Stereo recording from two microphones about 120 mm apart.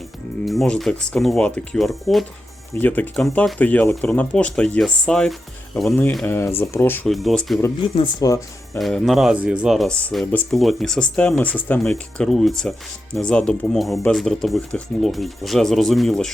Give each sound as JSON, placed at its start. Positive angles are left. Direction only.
{"t": 0.4, "sound": "speech", "side_deg": 0}
{"t": 2.7, "sound": "speech", "side_deg": 15}
{"t": 6.2, "sound": "speech", "side_deg": 20}
{"t": 7.1, "sound": "speech", "side_deg": 0}
{"t": 8.2, "sound": "speech", "side_deg": 30}
{"t": 8.8, "sound": "speech", "side_deg": 0}